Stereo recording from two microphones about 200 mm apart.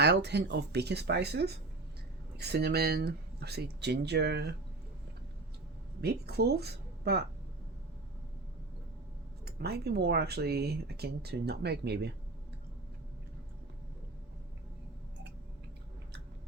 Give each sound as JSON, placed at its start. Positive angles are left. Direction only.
{"t": 0.0, "sound": "speech", "side_deg": -55}
{"t": 6.0, "sound": "speech", "side_deg": -55}
{"t": 9.4, "sound": "speech", "side_deg": -55}